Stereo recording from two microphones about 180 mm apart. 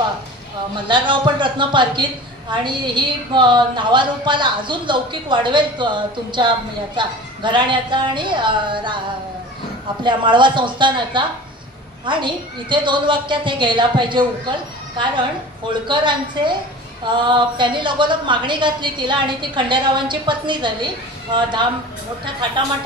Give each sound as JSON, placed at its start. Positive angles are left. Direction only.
{"t": 0.8, "sound": "a woman's voice", "side_deg": -25}
{"t": 10.0, "sound": "a woman's voice", "side_deg": -25}
{"t": 15.9, "sound": "a woman's voice", "side_deg": -25}